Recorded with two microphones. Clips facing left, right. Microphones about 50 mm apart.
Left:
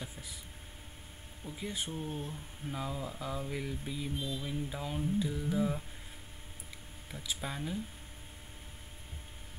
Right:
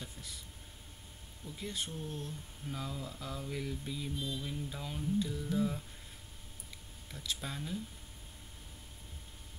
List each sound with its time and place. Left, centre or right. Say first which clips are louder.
0.0 s a sound: left 2 dB; centre
1.4 s speech: left 2 dB; centre
7.1 s speech: left 2 dB; centre